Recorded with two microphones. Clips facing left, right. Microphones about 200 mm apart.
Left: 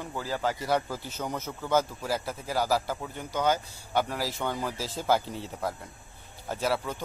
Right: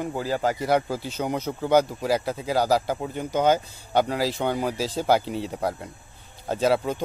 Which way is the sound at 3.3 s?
20° right (ahead or behind).